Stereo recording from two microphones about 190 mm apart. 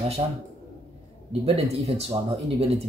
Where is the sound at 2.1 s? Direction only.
30° right (ahead or behind).